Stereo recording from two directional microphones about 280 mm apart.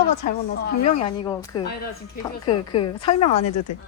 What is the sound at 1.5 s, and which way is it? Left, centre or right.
A woman's voice, centre.